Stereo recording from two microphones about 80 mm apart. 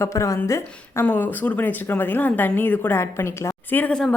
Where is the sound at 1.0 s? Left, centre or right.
Left.